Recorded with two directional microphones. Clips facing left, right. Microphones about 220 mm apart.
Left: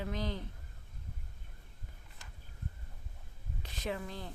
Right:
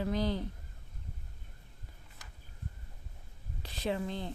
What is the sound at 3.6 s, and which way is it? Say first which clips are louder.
Speech: right 5 dB; 30° right (ahead or behind).